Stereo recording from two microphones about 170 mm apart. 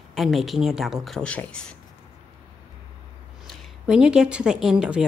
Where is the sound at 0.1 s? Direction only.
Centre (ahead or behind).